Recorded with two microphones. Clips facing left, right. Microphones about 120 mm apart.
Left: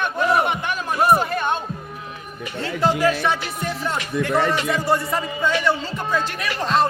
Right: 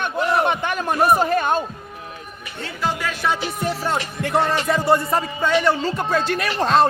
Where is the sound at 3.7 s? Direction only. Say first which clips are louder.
Left 1 dB; 30° right (ahead or behind).